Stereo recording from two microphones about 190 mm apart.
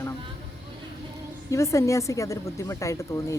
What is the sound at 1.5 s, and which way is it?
Speech, 15° left (ahead or behind).